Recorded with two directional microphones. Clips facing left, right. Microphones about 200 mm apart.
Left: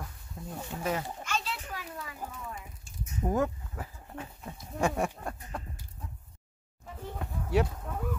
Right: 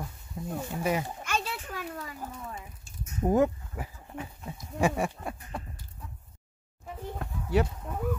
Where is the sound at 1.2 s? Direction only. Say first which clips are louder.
Right 2 dB; 55° right (ahead or behind).